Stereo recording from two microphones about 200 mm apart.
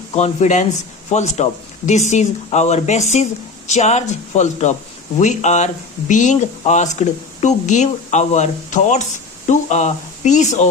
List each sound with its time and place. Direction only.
0.1 s speech: 35° left (ahead or behind)